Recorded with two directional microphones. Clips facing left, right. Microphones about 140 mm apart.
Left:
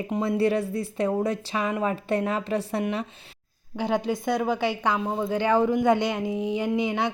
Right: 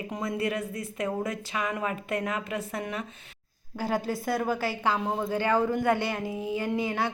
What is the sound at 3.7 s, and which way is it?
A woman's voice, 5° right (ahead or behind).